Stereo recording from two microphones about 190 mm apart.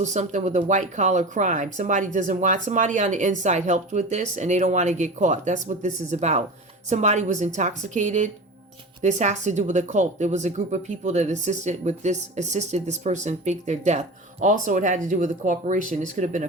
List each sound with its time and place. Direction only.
0.0 s speech: 40° right (ahead or behind)